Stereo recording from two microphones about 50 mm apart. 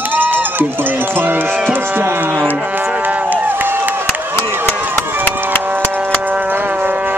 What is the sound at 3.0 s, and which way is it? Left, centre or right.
Run, right.